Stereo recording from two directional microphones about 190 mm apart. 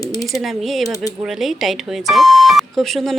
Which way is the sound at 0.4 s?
Centre (ahead or behind).